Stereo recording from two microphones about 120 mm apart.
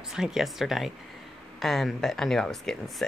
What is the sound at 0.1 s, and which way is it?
Speech, 5° right (ahead or behind).